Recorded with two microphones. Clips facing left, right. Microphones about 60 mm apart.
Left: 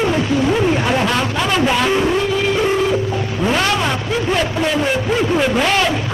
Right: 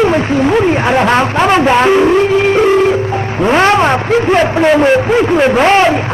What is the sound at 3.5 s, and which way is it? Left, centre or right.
A man's voice, right.